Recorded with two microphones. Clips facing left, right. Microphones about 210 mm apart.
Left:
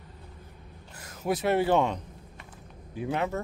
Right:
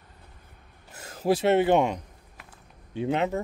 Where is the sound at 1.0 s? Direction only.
30° right (ahead or behind).